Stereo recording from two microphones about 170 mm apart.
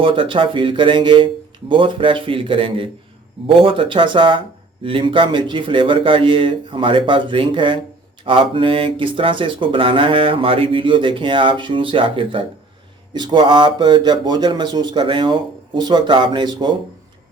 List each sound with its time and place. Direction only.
0.0 s speech: 30° right (ahead or behind)